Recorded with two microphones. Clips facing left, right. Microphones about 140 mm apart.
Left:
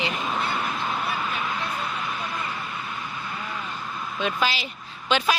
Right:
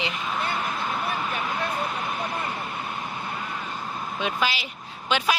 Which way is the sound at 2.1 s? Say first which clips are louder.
Right 2 dB; 50° right (ahead or behind).